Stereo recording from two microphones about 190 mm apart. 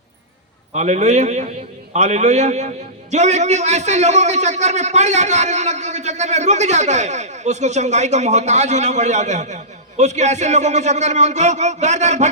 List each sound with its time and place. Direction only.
0.7 s a man's voice: 35° right (ahead or behind)